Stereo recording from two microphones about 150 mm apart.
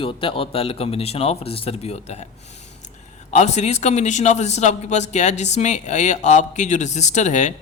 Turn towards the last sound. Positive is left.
turn(degrees=50)  # may be behind; listen again after turning